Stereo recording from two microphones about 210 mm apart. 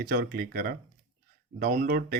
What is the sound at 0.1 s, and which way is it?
Speech, 45° right (ahead or behind).